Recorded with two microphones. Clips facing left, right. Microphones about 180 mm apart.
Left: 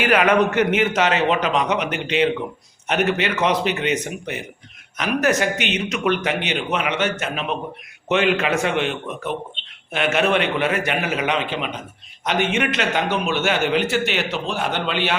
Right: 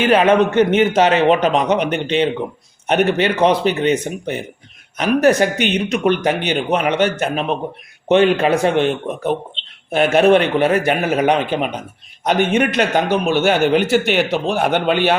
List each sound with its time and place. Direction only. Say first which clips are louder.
0.0 s a man's voice: right 4 dB; 30° right (ahead or behind)
13.7 s a man's voice: right 6 dB; 55° right (ahead or behind)